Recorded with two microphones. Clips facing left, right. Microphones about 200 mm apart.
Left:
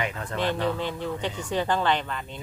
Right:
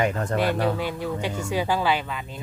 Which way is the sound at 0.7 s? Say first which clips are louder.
Right 2 dB; 10° right (ahead or behind).